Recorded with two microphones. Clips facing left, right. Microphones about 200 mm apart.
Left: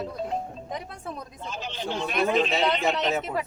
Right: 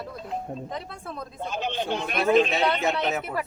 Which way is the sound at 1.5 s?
55° right (ahead or behind).